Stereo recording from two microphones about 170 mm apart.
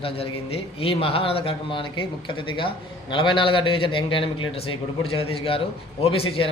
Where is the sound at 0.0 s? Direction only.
35° left (ahead or behind).